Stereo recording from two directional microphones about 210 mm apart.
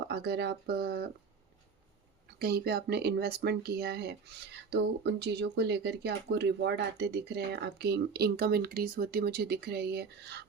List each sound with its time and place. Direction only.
0.1 s speech: 50° right (ahead or behind)
2.4 s speech: 50° right (ahead or behind)